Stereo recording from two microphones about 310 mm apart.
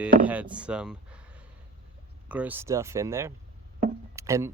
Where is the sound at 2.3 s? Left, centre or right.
Centre.